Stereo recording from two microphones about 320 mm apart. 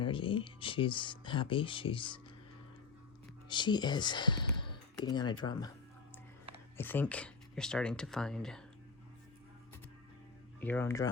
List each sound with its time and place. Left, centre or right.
0.0 s speech: centre
3.5 s speech: centre
6.7 s speech: centre
10.6 s speech: centre